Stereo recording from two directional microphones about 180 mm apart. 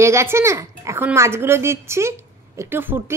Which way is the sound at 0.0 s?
15° right (ahead or behind).